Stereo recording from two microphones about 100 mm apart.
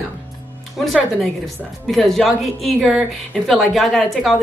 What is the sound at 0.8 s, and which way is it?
Speech, centre (ahead or behind).